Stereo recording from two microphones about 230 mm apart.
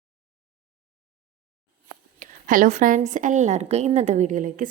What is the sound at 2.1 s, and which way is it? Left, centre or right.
A woman's voice, right.